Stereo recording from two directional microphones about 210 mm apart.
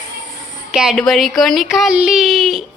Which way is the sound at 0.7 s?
Centre (ahead or behind).